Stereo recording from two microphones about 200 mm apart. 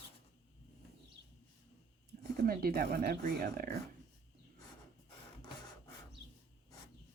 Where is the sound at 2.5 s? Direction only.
50° right (ahead or behind).